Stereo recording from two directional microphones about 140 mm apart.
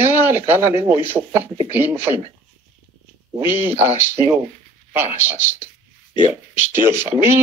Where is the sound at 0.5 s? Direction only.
20° right (ahead or behind).